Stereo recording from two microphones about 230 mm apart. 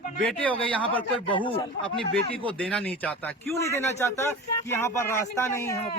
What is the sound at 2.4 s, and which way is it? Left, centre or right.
Speech, centre.